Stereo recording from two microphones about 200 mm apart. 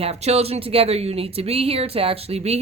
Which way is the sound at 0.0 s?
30° right (ahead or behind).